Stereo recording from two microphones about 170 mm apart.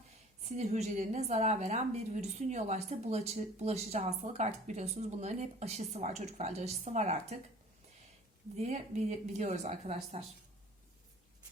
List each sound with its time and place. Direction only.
0.4 s a woman's voice: 40° right (ahead or behind)
8.5 s a woman's voice: 40° right (ahead or behind)